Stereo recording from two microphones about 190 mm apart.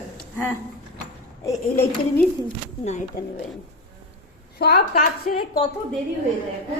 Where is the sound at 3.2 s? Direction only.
50° left (ahead or behind).